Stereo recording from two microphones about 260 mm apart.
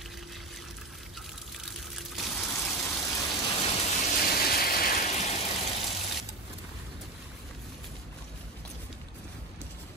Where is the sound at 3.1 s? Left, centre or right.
Centre.